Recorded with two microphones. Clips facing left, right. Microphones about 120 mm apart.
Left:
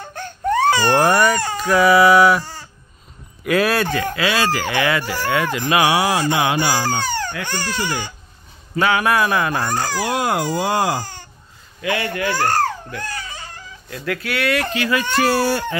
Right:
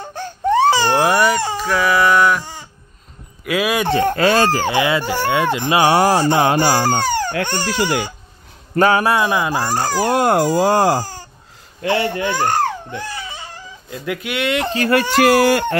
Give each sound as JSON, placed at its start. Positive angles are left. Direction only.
{"t": 0.0, "sound": "baby cry", "side_deg": -25}
{"t": 0.8, "sound": "a sound", "side_deg": -5}
{"t": 3.4, "sound": "speech", "side_deg": -10}
{"t": 3.8, "sound": "speech", "side_deg": -30}
{"t": 4.1, "sound": "speech", "side_deg": -45}
{"t": 5.9, "sound": "music", "side_deg": -40}
{"t": 7.4, "sound": "speech", "side_deg": -25}
{"t": 8.7, "sound": "speech", "side_deg": -40}
{"t": 9.8, "sound": "speech", "side_deg": -45}
{"t": 14.9, "sound": "speech", "side_deg": -70}